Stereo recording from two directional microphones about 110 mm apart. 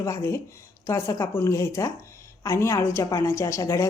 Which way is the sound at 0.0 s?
25° left (ahead or behind).